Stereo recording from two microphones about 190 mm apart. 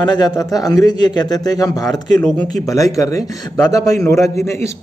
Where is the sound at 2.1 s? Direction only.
Centre (ahead or behind).